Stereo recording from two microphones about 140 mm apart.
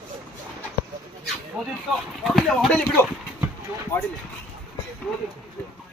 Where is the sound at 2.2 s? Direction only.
Centre (ahead or behind).